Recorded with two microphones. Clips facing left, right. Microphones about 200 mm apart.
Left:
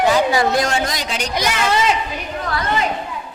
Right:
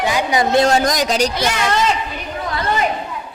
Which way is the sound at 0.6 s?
40° right (ahead or behind).